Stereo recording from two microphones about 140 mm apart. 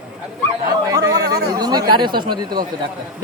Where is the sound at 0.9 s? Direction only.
25° right (ahead or behind).